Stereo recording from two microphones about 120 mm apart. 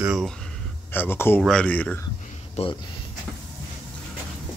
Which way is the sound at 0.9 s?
20° left (ahead or behind).